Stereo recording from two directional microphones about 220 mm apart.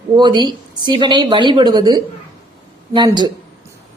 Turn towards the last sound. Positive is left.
turn(degrees=-20)  # may be behind; listen again after turning